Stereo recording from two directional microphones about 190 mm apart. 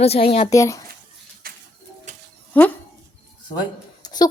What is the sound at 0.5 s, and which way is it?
Speech, 15° left (ahead or behind).